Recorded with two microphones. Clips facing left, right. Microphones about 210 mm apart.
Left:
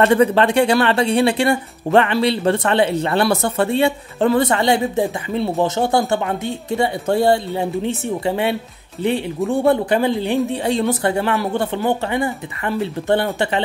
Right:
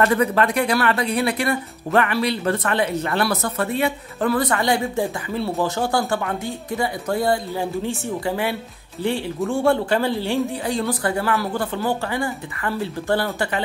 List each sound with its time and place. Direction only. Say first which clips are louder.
0.0 s speech: left 5 dB; 25° left (ahead or behind)